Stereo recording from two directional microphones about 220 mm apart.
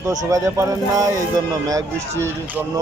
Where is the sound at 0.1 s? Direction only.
15° right (ahead or behind).